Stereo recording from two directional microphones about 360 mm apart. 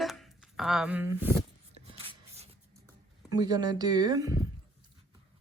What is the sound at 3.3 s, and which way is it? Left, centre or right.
Speech, centre.